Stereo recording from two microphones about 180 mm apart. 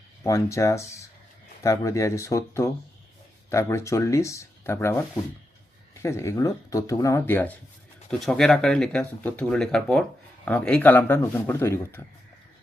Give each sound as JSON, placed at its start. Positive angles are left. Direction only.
{"t": 0.2, "sound": "speech", "side_deg": 15}